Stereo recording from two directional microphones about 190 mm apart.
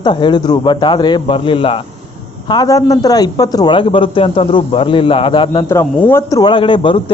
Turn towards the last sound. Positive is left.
turn(degrees=30)  # may be behind; listen again after turning